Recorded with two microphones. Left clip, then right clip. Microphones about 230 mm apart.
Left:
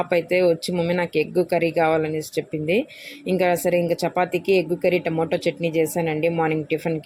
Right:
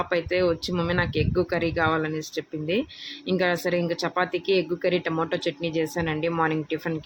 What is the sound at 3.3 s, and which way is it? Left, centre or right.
Speech, right.